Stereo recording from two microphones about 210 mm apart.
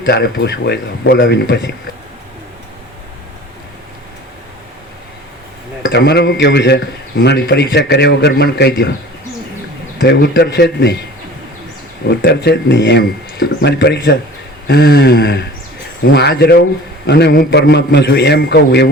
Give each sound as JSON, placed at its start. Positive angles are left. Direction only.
{"t": 0.0, "sound": "speech", "side_deg": 50}
{"t": 5.8, "sound": "speech", "side_deg": 55}
{"t": 10.0, "sound": "speech", "side_deg": 50}
{"t": 12.2, "sound": "speech", "side_deg": 55}